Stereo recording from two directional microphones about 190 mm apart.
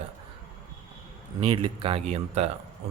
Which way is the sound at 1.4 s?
25° right (ahead or behind).